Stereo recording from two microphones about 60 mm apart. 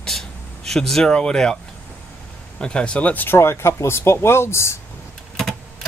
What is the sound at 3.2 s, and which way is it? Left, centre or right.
Speech, left.